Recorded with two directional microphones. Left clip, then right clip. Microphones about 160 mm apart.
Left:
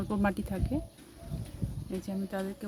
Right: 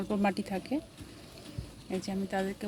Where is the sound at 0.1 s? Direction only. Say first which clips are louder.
Right 1 dB; 25° left (ahead or behind).